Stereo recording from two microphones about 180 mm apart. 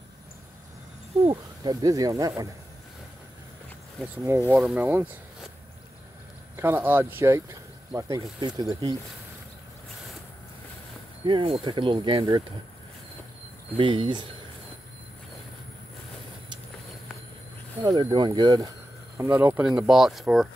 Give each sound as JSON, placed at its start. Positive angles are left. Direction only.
{"t": 1.2, "sound": "speech", "side_deg": -25}
{"t": 4.2, "sound": "speech", "side_deg": -15}
{"t": 6.5, "sound": "speech", "side_deg": -10}
{"t": 11.2, "sound": "speech", "side_deg": -30}
{"t": 13.7, "sound": "speech", "side_deg": -30}
{"t": 17.8, "sound": "speech", "side_deg": -25}
{"t": 19.1, "sound": "speech", "side_deg": -10}